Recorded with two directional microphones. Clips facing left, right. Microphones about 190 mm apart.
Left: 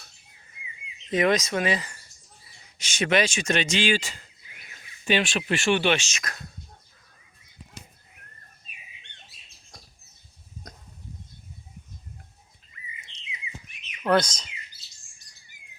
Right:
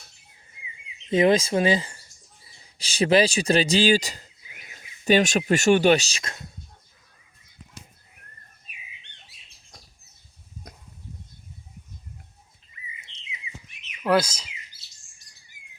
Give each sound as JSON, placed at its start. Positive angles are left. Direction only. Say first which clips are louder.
{"t": 1.1, "sound": "speech", "louder": "right 4 dB", "side_deg": -30}
{"t": 14.0, "sound": "speech", "louder": "right 1 dB", "side_deg": -5}